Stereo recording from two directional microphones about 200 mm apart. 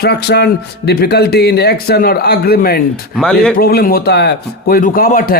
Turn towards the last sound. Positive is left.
turn(degrees=45)  # may be behind; listen again after turning